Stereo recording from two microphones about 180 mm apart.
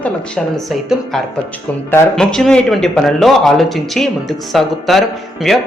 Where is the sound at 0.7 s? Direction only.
Centre (ahead or behind).